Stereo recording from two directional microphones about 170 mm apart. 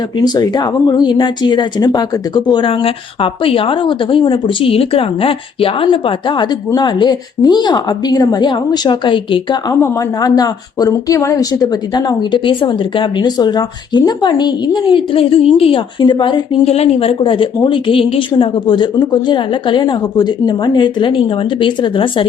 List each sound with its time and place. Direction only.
0.2 s a woman's voice: 25° left (ahead or behind)